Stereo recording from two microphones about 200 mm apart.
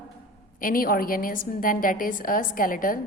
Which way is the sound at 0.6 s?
45° left (ahead or behind).